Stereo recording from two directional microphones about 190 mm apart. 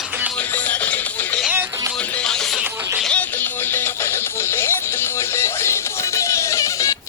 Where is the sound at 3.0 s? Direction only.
5° left (ahead or behind).